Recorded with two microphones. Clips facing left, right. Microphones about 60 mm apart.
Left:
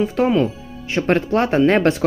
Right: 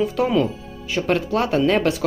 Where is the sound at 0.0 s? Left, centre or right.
Left.